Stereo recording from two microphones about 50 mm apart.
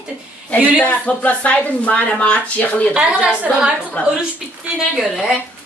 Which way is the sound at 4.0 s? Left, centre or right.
Left.